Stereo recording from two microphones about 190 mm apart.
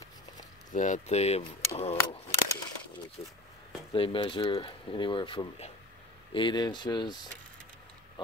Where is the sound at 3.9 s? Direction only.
30° left (ahead or behind).